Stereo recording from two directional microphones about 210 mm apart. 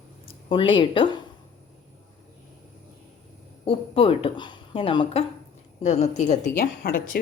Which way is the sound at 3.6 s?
25° left (ahead or behind).